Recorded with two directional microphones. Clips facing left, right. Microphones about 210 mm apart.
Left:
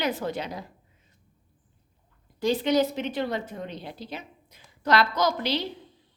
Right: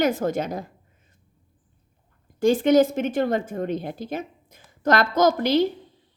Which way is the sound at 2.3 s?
50° right (ahead or behind).